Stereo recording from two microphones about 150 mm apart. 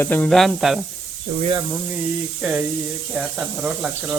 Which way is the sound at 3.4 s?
10° right (ahead or behind).